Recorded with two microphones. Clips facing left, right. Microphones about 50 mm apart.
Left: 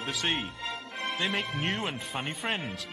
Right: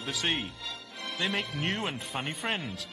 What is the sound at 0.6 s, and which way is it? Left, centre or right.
Music, left.